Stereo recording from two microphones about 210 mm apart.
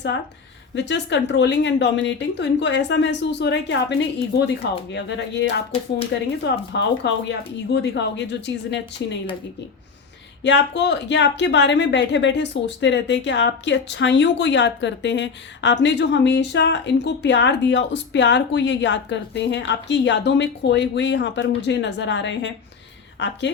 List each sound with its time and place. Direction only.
0.8 s speech: 55° left (ahead or behind)
10.4 s a woman's voice: 55° left (ahead or behind)